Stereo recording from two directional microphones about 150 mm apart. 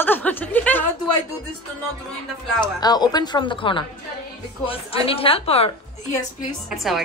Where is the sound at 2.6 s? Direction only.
25° left (ahead or behind).